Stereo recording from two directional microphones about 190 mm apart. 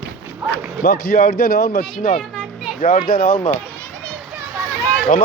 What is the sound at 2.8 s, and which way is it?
Speech, 50° left (ahead or behind).